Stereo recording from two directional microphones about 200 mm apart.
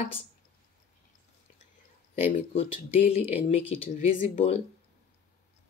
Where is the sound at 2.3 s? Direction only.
30° left (ahead or behind).